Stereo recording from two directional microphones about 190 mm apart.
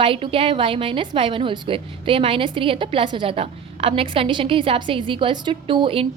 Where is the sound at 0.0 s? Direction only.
30° right (ahead or behind).